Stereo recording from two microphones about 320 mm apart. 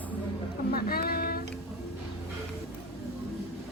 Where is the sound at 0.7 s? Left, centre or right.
Left.